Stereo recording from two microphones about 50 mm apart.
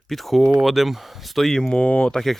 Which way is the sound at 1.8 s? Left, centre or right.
Left.